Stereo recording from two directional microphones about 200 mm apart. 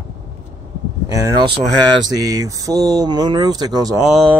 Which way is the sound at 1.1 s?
20° right (ahead or behind).